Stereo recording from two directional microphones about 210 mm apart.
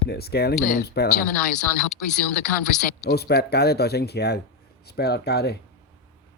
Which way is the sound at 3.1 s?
50° left (ahead or behind).